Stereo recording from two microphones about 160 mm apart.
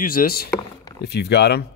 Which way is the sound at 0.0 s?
65° left (ahead or behind).